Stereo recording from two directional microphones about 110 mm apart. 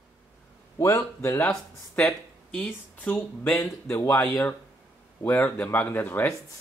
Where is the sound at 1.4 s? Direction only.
5° left (ahead or behind).